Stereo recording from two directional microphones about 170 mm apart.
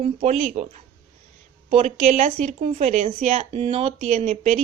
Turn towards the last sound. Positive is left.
turn(degrees=-45)  # may be behind; listen again after turning